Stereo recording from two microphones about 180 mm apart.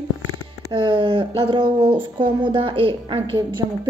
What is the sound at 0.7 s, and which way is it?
Speech, 30° right (ahead or behind).